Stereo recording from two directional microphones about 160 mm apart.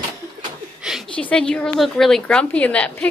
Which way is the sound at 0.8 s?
Centre (ahead or behind).